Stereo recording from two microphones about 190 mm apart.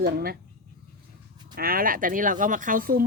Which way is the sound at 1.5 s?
50° right (ahead or behind).